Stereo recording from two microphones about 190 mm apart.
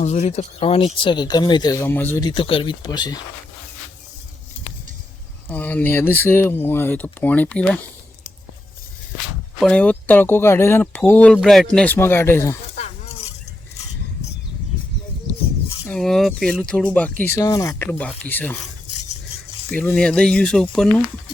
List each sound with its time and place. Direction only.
0.0 s speech: 35° left (ahead or behind); by 2.2 s 10° left (ahead or behind)
2.2 s speech: 25° left (ahead or behind)
5.5 s speech: 10° left (ahead or behind)
9.6 s speech: 5° left (ahead or behind)
15.9 s speech: centre (ahead or behind)
19.7 s speech: 5° left (ahead or behind)